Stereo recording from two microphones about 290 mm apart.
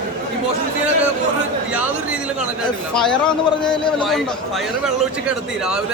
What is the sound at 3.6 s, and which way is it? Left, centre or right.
Speech, centre.